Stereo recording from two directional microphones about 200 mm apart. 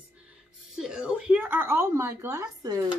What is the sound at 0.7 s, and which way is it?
Speech, 5° right (ahead or behind).